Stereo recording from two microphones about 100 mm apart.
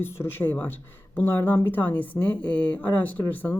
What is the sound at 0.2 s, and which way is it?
Speech, 25° left (ahead or behind).